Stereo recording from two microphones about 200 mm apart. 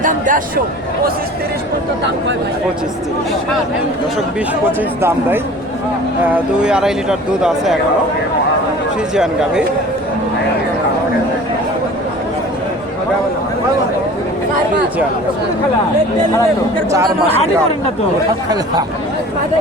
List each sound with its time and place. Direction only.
0.0 s speech: 40° right (ahead or behind)
6.3 s speech: 5° right (ahead or behind)
9.1 s speech: 5° right (ahead or behind)
17.2 s speech: 30° left (ahead or behind)